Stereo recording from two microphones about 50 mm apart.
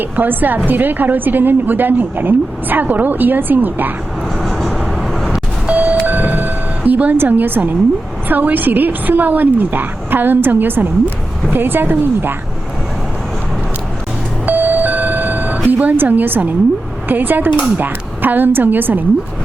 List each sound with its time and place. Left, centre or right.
0.0 s a woman's voice: right
4.4 s vehicle: centre
5.6 s vehicle: right
6.1 s a sound: right
8.3 s a woman's voice: right
14.4 s alarm clock: right
17.1 s a woman's voice: right